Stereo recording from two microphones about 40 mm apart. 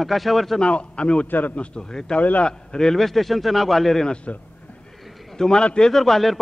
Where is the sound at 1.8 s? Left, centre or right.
Centre.